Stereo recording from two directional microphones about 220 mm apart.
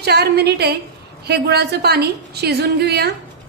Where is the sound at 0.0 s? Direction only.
45° right (ahead or behind).